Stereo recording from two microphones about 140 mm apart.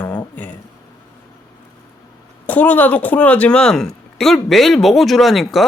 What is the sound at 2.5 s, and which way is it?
Speech, 10° left (ahead or behind).